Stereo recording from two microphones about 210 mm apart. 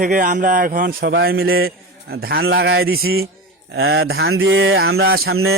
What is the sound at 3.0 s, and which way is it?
Speech, 80° right.